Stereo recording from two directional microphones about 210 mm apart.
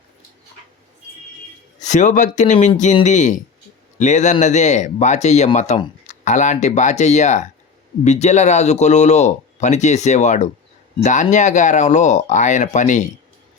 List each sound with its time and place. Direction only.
1.8 s speech: 35° left (ahead or behind)